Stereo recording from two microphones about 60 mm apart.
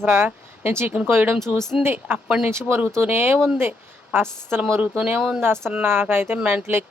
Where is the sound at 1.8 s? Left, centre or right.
Centre.